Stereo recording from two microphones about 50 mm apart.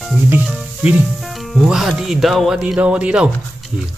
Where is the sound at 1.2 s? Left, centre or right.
Centre.